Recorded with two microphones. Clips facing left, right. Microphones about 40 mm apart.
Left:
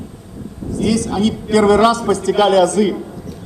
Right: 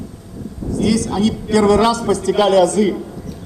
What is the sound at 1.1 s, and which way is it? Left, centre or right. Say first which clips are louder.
A man's voice: left 1 dB; left.